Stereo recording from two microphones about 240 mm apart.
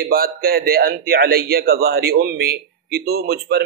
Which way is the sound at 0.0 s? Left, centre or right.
Right.